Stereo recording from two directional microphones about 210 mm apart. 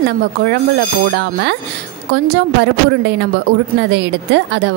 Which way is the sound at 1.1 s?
55° right (ahead or behind).